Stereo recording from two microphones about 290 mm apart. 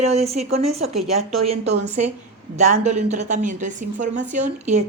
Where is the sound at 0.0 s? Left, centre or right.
Right.